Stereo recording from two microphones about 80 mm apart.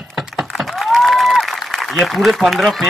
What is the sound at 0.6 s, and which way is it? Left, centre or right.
A man's voice, centre.